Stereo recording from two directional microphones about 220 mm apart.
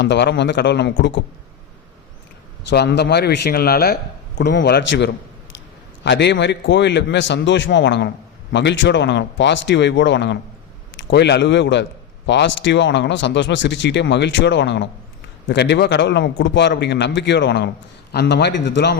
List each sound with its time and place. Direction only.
0.0 s a man's voice: 50° left (ahead or behind)
2.6 s a man's voice: 50° left (ahead or behind)